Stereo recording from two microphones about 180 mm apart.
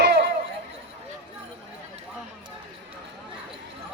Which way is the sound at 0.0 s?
65° right (ahead or behind).